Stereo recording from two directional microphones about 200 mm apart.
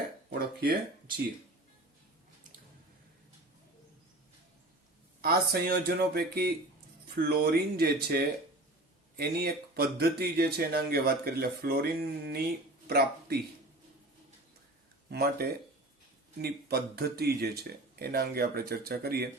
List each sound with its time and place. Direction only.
0.3 s speech: 50° right (ahead or behind)
5.2 s speech: 50° right (ahead or behind)
15.1 s speech: 50° right (ahead or behind)